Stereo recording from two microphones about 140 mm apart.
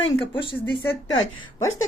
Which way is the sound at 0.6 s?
15° left (ahead or behind).